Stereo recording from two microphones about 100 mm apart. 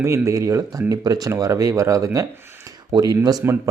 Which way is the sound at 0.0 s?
30° right (ahead or behind).